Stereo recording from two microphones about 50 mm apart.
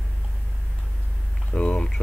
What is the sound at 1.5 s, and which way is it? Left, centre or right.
Speech, left.